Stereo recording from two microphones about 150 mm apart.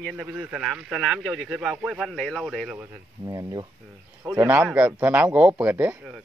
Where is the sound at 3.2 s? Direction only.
25° right (ahead or behind).